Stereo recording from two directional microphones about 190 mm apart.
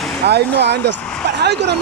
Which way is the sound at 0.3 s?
60° right (ahead or behind).